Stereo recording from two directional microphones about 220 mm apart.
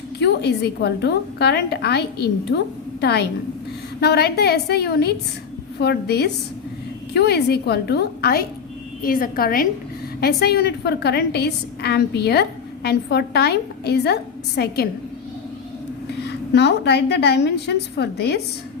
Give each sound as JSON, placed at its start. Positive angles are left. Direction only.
{"t": 0.2, "sound": "a woman's voice", "side_deg": 50}
{"t": 16.2, "sound": "a woman's voice", "side_deg": 50}